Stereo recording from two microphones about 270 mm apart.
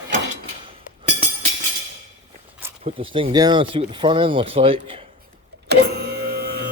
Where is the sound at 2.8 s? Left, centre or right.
Centre.